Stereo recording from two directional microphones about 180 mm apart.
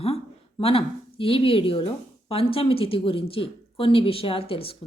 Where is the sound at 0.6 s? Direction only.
30° left (ahead or behind).